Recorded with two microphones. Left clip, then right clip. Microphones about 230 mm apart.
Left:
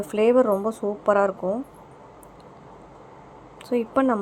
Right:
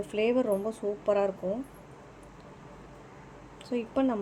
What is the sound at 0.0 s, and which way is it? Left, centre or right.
A woman's voice, centre.